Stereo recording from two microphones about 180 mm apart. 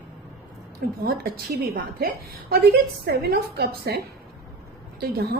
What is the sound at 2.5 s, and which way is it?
A woman's voice, 60° right (ahead or behind).